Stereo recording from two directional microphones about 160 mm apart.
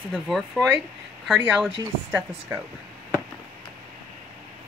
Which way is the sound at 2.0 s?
10° right (ahead or behind).